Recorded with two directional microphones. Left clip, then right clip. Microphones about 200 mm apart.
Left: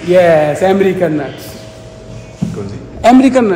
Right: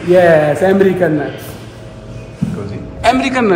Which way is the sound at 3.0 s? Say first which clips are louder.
Left 5 dB; 45° left (ahead or behind).